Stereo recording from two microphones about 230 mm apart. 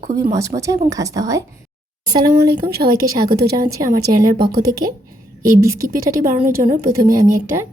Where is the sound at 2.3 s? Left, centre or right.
Right.